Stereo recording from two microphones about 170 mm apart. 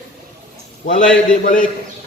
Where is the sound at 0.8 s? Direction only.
45° left (ahead or behind).